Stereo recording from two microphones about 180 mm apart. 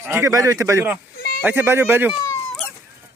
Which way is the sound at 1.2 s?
55° left (ahead or behind).